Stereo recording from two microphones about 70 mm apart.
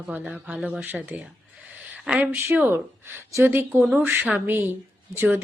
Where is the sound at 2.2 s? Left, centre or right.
Right.